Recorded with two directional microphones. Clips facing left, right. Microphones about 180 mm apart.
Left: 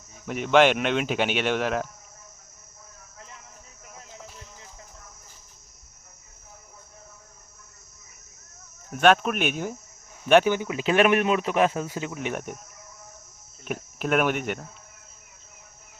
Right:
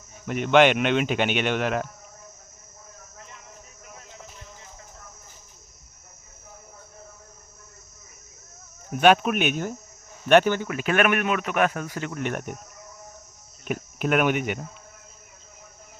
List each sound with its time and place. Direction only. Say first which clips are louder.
0.3 s speech: right 1 dB; centre (ahead or behind)
8.9 s speech: right 1 dB; 5° right (ahead or behind)
10.5 s speech: left 1 dB; 15° left (ahead or behind)
11.9 s speech: even; 15° left (ahead or behind)
12.1 s speech: right 2 dB; centre (ahead or behind)
13.7 s speech: right 2 dB; centre (ahead or behind)